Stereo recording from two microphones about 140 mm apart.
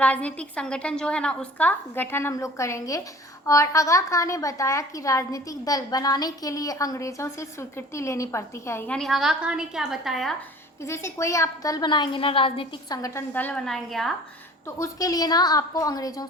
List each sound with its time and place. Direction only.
0.0 s a woman's voice: 10° left (ahead or behind)
8.9 s a woman's voice: centre (ahead or behind)
10.8 s a woman's voice: 20° left (ahead or behind); by 12.6 s 40° left (ahead or behind)
12.9 s a woman's voice: 25° left (ahead or behind)
13.3 s a woman's voice: 10° left (ahead or behind)
14.8 s a woman's voice: 25° left (ahead or behind)